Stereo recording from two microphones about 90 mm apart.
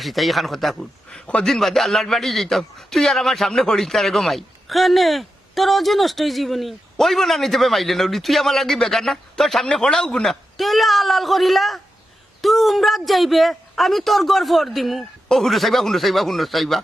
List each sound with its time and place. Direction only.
0.0 s a man's voice: centre (ahead or behind)